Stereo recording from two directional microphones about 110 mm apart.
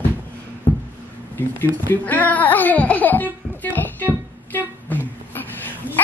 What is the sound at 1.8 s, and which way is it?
Speech, 15° left (ahead or behind).